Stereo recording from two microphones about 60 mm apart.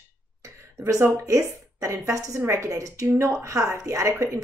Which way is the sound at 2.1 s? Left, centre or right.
Right.